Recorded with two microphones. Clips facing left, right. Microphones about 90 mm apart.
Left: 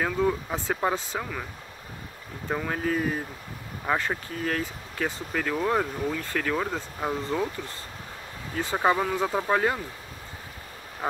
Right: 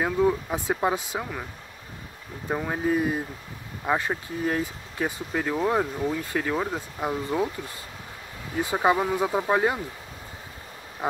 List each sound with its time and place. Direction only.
0.0 s speech: 10° right (ahead or behind)
2.5 s speech: 15° right (ahead or behind)
8.7 s speech: 10° right (ahead or behind)